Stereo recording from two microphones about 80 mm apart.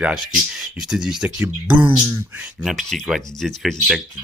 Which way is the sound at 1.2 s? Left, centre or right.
Right.